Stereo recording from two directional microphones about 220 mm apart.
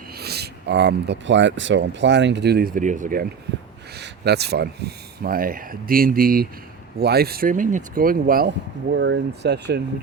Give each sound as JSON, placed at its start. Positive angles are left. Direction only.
{"t": 0.1, "sound": "speech", "side_deg": -45}